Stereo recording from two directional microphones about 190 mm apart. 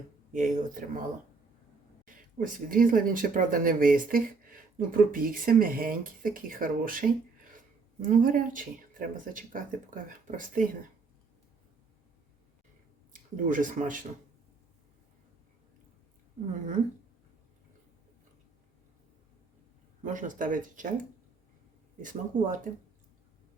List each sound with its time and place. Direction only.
0.3 s speech: 45° right (ahead or behind)
2.0 s speech: 45° right (ahead or behind)
8.1 s speech: 45° right (ahead or behind)
13.1 s speech: 45° right (ahead or behind)
20.0 s speech: 45° right (ahead or behind)